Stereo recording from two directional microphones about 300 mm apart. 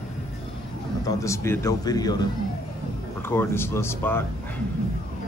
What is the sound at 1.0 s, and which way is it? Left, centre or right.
Speech, centre.